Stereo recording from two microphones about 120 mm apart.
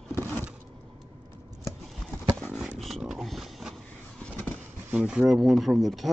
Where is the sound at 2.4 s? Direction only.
10° right (ahead or behind).